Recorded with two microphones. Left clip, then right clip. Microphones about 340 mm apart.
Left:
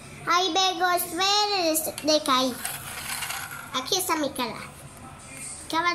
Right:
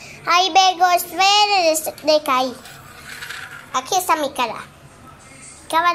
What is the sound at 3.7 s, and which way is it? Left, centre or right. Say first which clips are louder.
Child singing: right 8 dB; centre.